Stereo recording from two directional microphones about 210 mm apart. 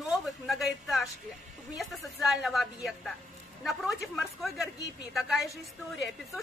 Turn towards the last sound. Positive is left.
turn(degrees=0)  # may be behind; listen again after turning